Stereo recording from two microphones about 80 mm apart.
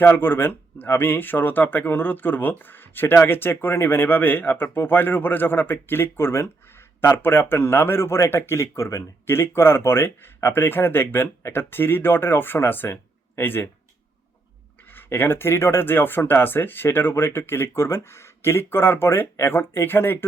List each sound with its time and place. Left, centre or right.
0.0 s speech: left
9.2 s speech: left
14.8 s speech: left